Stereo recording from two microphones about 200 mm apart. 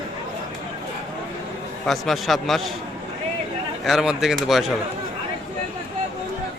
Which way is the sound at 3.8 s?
Centre (ahead or behind).